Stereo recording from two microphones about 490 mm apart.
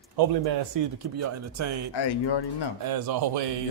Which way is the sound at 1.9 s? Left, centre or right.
Left.